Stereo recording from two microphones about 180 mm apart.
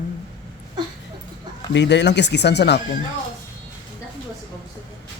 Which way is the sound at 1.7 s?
75° left (ahead or behind).